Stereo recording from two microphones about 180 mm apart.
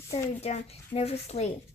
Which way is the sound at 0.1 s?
40° left (ahead or behind).